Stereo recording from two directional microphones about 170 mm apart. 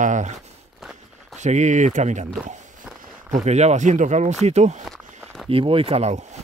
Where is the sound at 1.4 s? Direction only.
45° right (ahead or behind).